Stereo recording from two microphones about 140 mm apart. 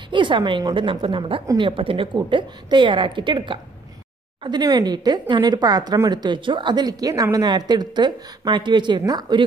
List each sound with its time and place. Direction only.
0.1 s a woman's voice: 35° right (ahead or behind)